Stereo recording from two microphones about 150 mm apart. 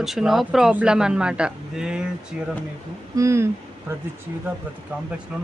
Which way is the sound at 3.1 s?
20° right (ahead or behind).